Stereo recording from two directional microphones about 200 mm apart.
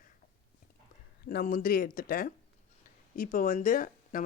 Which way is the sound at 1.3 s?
45° left (ahead or behind).